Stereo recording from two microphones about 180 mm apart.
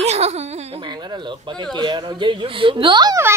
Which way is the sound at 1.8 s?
25° right (ahead or behind).